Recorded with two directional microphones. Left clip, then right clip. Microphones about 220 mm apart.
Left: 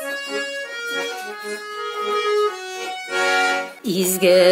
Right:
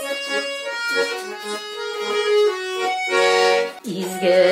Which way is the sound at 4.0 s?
50° left (ahead or behind).